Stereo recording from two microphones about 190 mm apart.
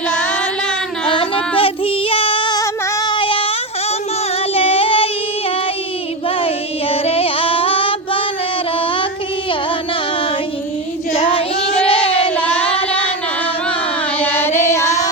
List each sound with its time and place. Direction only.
1.0 s child singing: 30° left (ahead or behind)
4.5 s child singing: 30° left (ahead or behind)
6.2 s music: 30° left (ahead or behind)
11.1 s child singing: 30° left (ahead or behind)
12.4 s child singing: 5° left (ahead or behind)
14.2 s music: 10° left (ahead or behind)